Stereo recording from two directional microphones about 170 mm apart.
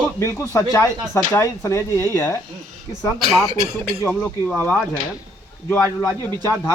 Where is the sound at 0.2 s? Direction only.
15° left (ahead or behind).